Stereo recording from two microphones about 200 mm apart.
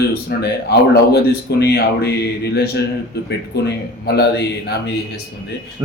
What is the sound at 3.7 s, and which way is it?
Speech, 55° left (ahead or behind).